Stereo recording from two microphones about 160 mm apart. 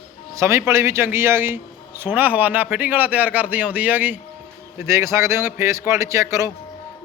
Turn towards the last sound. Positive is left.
turn(degrees=-20)  # may be behind; listen again after turning